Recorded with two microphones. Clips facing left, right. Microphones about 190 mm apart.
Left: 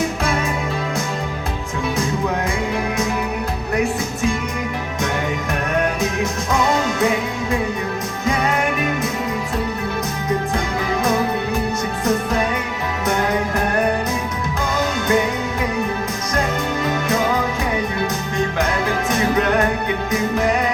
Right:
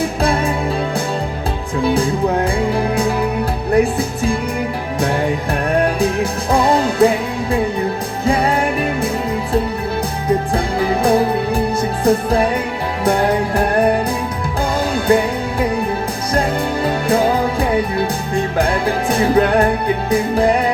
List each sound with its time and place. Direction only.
0.0 s music: 35° right (ahead or behind)
1.8 s music: 30° right (ahead or behind)
5.7 s music: 30° right (ahead or behind)
10.2 s music: 30° right (ahead or behind)
14.9 s music: 30° right (ahead or behind)
16.8 s music: 30° right (ahead or behind)
18.9 s music: 30° right (ahead or behind)